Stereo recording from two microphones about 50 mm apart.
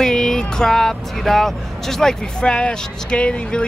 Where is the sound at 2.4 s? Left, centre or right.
Centre.